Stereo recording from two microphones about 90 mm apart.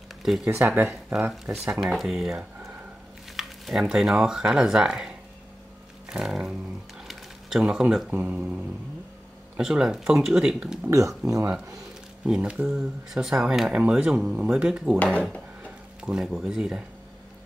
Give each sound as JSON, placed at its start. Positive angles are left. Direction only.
{"t": 0.2, "sound": "speech", "side_deg": -5}
{"t": 0.5, "sound": "speech", "side_deg": -25}
{"t": 0.8, "sound": "speech", "side_deg": 0}
{"t": 6.0, "sound": "roaring cats", "side_deg": -5}
{"t": 7.1, "sound": "a sound", "side_deg": -5}
{"t": 7.8, "sound": "speech", "side_deg": -5}
{"t": 8.1, "sound": "speech", "side_deg": -20}
{"t": 9.6, "sound": "speech", "side_deg": -5}
{"t": 10.9, "sound": "speech", "side_deg": -35}
{"t": 12.3, "sound": "speech", "side_deg": -15}
{"t": 16.0, "sound": "speech", "side_deg": -10}